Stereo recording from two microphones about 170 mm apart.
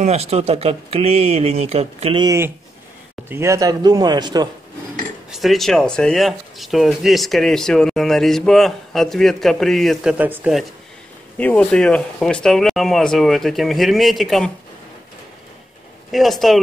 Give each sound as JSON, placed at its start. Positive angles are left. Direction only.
{"t": 0.0, "sound": "speech", "side_deg": -40}
{"t": 2.2, "sound": "speech", "side_deg": -15}
{"t": 5.3, "sound": "speech", "side_deg": 0}
{"t": 11.3, "sound": "speech", "side_deg": 10}
{"t": 16.1, "sound": "speech", "side_deg": 0}